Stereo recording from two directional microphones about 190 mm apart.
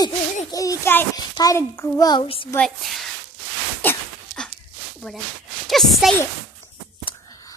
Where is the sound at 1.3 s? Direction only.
15° left (ahead or behind).